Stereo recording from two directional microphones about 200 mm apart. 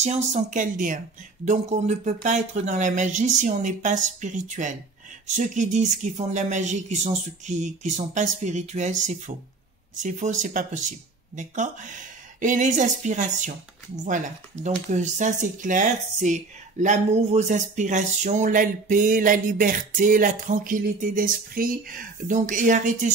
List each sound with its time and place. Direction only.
0.0 s speech: 35° right (ahead or behind)
14.6 s speech: 35° right (ahead or behind)